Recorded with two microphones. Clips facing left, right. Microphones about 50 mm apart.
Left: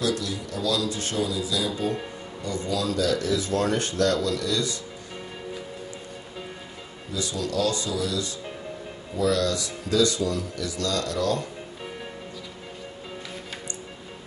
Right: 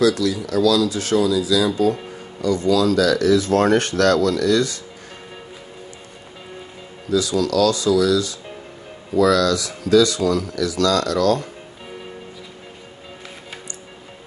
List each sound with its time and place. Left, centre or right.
0.3 s speech: right
7.1 s speech: right